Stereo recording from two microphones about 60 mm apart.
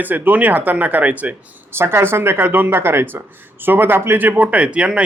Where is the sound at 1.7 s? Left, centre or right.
Right.